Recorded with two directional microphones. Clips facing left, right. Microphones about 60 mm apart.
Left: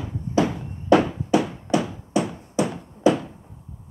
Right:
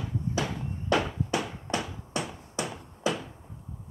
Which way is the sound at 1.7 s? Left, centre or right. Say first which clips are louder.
Left 10 dB; centre.